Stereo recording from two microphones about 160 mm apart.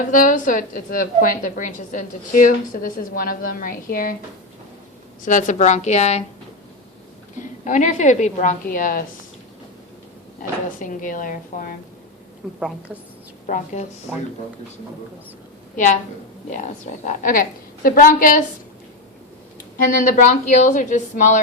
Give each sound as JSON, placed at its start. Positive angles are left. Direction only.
{"t": 0.1, "sound": "a woman's voice", "side_deg": 55}
{"t": 5.2, "sound": "a woman's voice", "side_deg": 50}
{"t": 7.6, "sound": "a woman's voice", "side_deg": 50}
{"t": 10.8, "sound": "a woman's voice", "side_deg": 55}
{"t": 12.5, "sound": "a woman's voice", "side_deg": -5}
{"t": 14.1, "sound": "a woman's voice", "side_deg": 0}
{"t": 15.7, "sound": "a woman's voice", "side_deg": 50}
{"t": 19.8, "sound": "a woman's voice", "side_deg": 55}